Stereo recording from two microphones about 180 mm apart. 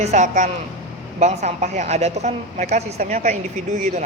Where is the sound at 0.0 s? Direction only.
40° right (ahead or behind).